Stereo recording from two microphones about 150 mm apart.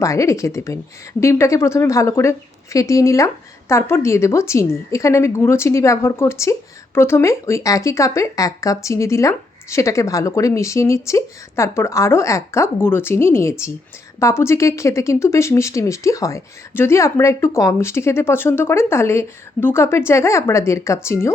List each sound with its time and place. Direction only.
0.0 s a woman's voice: 20° left (ahead or behind)